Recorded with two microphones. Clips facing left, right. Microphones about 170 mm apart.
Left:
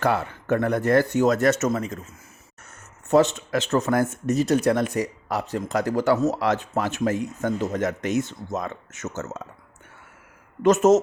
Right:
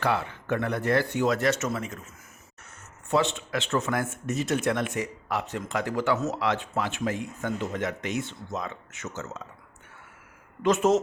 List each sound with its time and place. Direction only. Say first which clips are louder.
0.0 s speech: left 4 dB; 45° left (ahead or behind)
3.1 s speech: left 7 dB; 40° left (ahead or behind)
10.6 s speech: left 5 dB; 45° left (ahead or behind)